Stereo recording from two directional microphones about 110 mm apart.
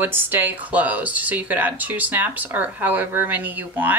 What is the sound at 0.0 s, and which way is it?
Speech, 20° right (ahead or behind).